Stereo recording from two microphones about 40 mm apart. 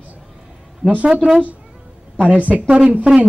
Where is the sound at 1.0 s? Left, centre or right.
Right.